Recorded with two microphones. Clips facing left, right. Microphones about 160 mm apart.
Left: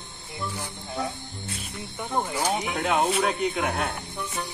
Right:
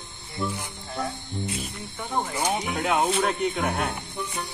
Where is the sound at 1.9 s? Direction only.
5° left (ahead or behind).